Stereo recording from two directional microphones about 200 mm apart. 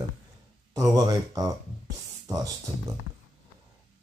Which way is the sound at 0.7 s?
20° right (ahead or behind).